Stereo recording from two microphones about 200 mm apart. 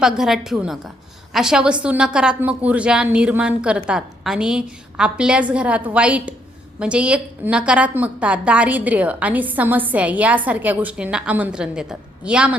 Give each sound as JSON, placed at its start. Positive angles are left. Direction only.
{"t": 0.0, "sound": "a woman's voice", "side_deg": -5}